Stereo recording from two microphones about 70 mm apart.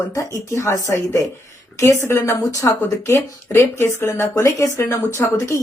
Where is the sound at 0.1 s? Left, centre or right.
Left.